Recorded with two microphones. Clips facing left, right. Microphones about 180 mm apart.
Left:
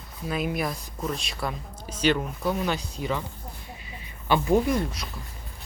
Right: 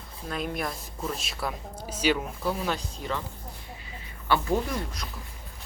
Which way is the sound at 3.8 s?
15° left (ahead or behind).